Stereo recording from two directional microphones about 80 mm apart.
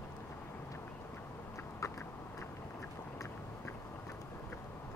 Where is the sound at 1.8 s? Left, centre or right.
Left.